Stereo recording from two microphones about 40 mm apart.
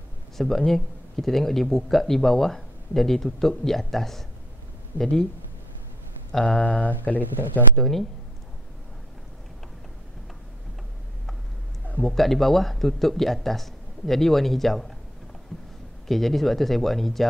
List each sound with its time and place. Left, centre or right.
0.7 s speech: centre
6.4 s speech: left
7.7 s speech: centre
12.0 s speech: centre
16.1 s speech: centre